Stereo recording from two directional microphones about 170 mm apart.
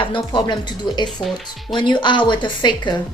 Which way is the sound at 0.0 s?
30° left (ahead or behind).